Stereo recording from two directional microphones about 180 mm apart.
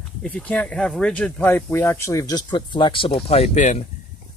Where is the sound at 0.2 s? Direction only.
5° left (ahead or behind).